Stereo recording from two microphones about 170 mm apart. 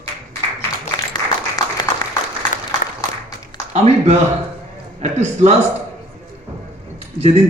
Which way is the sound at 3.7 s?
40° right (ahead or behind).